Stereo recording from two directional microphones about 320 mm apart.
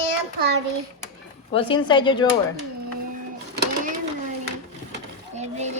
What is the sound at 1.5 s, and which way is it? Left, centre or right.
Speech, centre.